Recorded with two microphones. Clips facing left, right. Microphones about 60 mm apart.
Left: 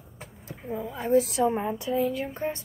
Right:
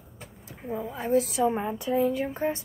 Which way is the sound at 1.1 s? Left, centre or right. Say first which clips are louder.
Left 1 dB; centre.